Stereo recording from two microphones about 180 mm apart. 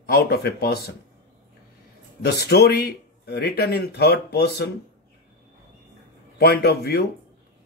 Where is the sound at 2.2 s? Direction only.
60° left (ahead or behind).